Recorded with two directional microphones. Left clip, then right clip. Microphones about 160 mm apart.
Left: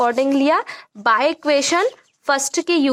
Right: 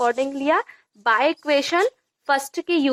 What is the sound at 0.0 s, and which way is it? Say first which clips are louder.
Speech: left 5 dB; 35° left (ahead or behind).